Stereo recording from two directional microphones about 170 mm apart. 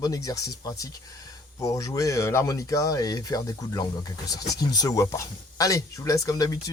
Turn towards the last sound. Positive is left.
turn(degrees=20)  # may be behind; listen again after turning